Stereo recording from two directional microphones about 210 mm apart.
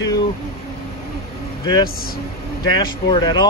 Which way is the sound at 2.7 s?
20° left (ahead or behind).